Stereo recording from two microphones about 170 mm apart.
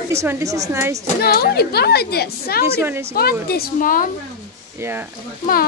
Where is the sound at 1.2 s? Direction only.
65° left (ahead or behind).